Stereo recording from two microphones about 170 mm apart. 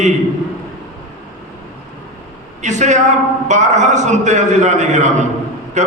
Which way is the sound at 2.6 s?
45° right (ahead or behind).